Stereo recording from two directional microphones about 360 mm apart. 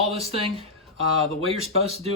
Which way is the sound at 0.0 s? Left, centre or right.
Centre.